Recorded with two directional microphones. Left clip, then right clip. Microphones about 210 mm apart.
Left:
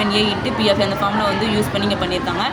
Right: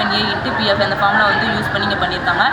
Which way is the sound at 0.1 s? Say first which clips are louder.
Right 1 dB; 90° left.